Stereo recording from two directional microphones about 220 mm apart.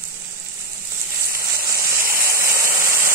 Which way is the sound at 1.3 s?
45° right (ahead or behind).